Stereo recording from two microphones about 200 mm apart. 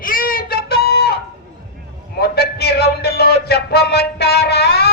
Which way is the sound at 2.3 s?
50° left (ahead or behind).